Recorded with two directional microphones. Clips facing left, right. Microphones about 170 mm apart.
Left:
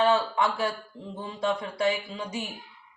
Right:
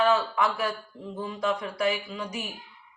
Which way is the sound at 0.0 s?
30° left (ahead or behind).